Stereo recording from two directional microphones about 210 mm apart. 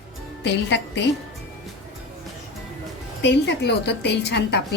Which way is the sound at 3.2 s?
55° left (ahead or behind).